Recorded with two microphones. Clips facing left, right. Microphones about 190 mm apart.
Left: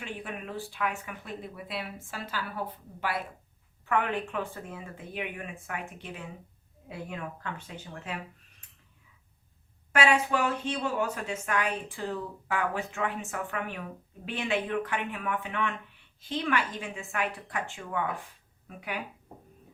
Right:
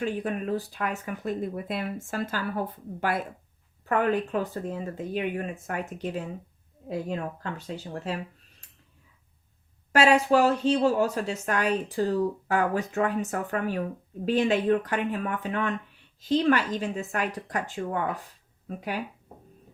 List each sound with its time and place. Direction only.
0.0 s speech: 40° right (ahead or behind)
9.9 s speech: 35° right (ahead or behind)